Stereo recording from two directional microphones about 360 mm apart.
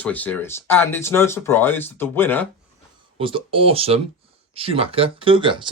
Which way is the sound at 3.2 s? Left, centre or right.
Centre.